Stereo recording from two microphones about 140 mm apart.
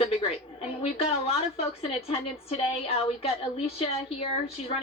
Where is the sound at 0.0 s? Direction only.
45° left (ahead or behind).